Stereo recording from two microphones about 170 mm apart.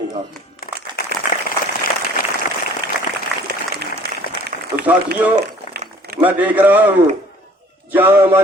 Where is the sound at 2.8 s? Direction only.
65° right (ahead or behind).